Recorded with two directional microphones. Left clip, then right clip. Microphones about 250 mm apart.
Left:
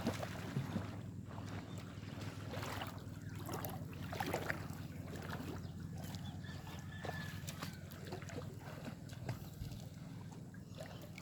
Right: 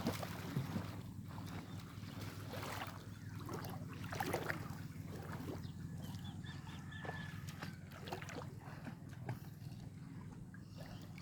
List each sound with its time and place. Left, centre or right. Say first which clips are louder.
0.0 s boat: left 1 dB; centre
2.2 s boat: left 1 dB; centre
4.1 s boat: even; centre